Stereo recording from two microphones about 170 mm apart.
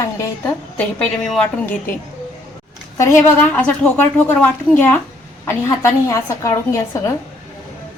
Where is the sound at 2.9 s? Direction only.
15° left (ahead or behind).